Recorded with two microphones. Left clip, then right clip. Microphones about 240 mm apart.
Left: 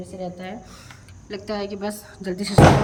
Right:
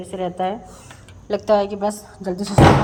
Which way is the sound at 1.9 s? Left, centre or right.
Centre.